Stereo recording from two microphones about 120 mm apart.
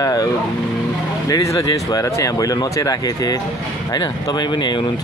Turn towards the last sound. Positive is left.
turn(degrees=35)  # may be behind; listen again after turning